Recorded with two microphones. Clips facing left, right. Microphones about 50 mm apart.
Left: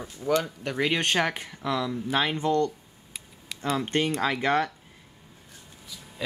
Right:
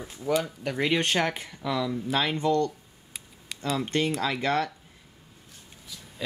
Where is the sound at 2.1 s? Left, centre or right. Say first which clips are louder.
Even; left.